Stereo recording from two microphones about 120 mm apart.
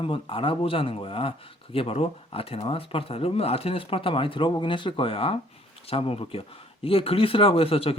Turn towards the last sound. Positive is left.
turn(degrees=55)  # may be behind; listen again after turning